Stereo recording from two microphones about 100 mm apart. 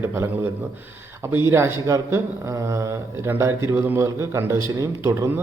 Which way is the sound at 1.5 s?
25° right (ahead or behind).